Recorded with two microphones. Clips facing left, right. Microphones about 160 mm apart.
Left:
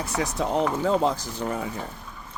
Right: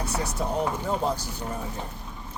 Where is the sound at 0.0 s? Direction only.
90° left.